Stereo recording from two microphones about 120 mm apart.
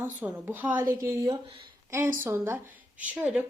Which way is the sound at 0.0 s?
15° right (ahead or behind).